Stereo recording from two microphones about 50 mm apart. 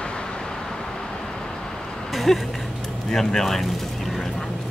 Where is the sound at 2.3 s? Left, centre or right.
Centre.